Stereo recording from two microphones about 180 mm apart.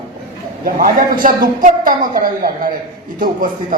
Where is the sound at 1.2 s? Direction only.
50° right (ahead or behind).